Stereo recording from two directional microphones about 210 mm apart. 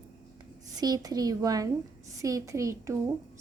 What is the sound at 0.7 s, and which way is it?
A woman's voice, 20° right (ahead or behind).